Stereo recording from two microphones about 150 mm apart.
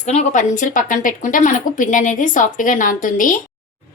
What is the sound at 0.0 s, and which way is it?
A woman's voice, 50° left (ahead or behind).